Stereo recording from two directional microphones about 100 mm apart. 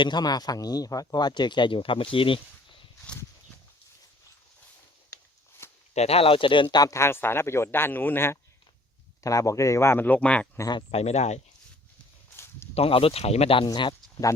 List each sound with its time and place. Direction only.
0.0 s speech: 45° left (ahead or behind); by 2.4 s 60° left (ahead or behind)
5.1 s a sound: 25° left (ahead or behind)
5.9 s speech: 90° left; by 6.9 s 45° left (ahead or behind)
6.9 s a man's voice: 25° left (ahead or behind)
10.9 s speech: 90° left
12.7 s speech: 75° left (ahead or behind)
13.7 s speech: 50° left (ahead or behind)